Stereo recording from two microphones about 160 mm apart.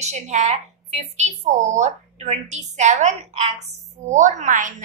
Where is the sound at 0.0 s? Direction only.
45° right (ahead or behind).